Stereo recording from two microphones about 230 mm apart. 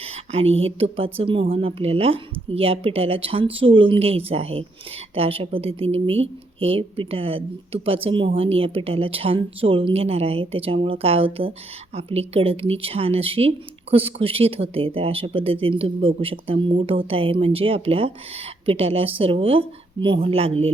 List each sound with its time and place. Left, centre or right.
0.0 s speech: right